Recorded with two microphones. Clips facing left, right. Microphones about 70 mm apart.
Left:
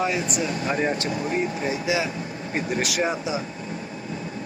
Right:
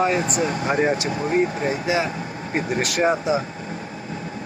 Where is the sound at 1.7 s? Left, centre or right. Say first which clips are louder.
Right 2 dB; right.